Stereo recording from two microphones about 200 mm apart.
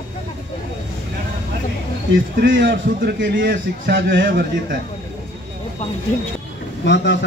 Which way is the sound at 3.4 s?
50° right (ahead or behind).